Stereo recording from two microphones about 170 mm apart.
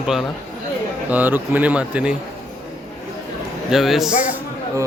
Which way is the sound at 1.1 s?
10° right (ahead or behind).